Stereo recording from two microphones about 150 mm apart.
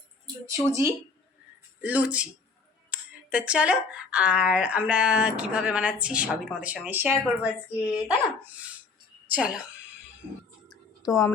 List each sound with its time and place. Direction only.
0.4 s speech: 20° right (ahead or behind)
1.8 s speech: 10° right (ahead or behind)
7.4 s speech: 20° left (ahead or behind)
7.9 s speech: 10° right (ahead or behind)
11.0 s a woman's voice: 20° left (ahead or behind)